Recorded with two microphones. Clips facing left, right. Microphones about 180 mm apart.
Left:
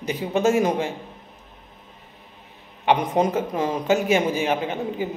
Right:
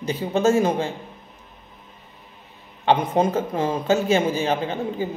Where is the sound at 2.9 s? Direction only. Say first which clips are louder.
Right 1 dB; 20° left (ahead or behind).